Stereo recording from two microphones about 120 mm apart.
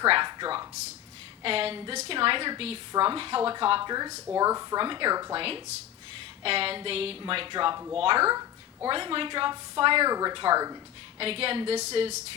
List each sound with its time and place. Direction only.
0.0 s a sound: 40° right (ahead or behind)
1.4 s a woman's voice: 50° right (ahead or behind)
3.8 s a woman's voice: 35° right (ahead or behind)
4.8 s a woman's voice: 40° right (ahead or behind)
5.4 s a woman's voice: 50° right (ahead or behind); by 8.9 s 30° right (ahead or behind)
8.9 s a woman's voice: 50° right (ahead or behind)
11.2 s a woman's voice: 50° right (ahead or behind)